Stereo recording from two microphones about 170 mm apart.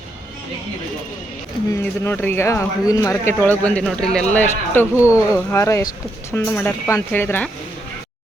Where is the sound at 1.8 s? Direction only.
15° left (ahead or behind).